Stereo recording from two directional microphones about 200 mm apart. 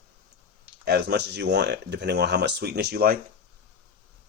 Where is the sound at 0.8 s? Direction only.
55° right (ahead or behind).